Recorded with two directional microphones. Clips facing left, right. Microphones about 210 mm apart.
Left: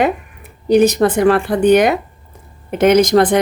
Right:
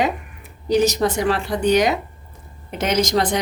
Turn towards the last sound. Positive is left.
turn(degrees=55)  # may be behind; listen again after turning